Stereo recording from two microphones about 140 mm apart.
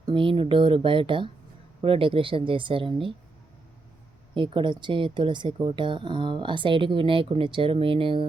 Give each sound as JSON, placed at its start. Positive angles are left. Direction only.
{"t": 0.0, "sound": "speech", "side_deg": -35}
{"t": 4.4, "sound": "speech", "side_deg": -35}